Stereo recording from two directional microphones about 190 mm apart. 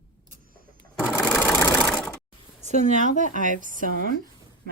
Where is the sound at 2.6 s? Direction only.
35° right (ahead or behind).